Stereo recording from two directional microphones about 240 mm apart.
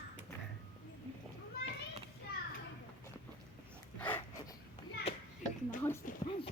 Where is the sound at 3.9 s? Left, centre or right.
Centre.